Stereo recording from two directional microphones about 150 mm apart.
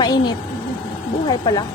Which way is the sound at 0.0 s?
30° left (ahead or behind).